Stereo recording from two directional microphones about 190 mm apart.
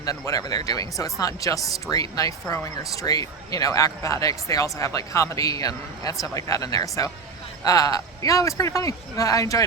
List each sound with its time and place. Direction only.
0.0 s speech: 20° left (ahead or behind)